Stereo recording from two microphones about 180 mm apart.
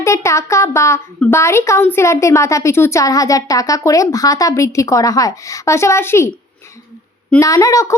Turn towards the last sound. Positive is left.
turn(degrees=20)  # may be behind; listen again after turning